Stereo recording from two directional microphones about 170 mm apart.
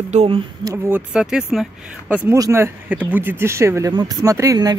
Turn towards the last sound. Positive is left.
turn(degrees=-20)  # may be behind; listen again after turning